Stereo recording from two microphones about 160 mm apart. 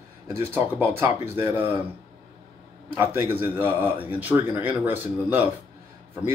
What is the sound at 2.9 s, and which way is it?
Speech, 15° right (ahead or behind).